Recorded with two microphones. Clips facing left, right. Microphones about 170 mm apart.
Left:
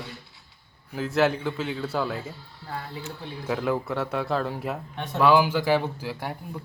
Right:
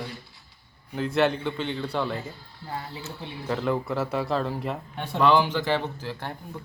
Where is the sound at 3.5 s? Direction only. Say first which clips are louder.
Even; 5° left (ahead or behind).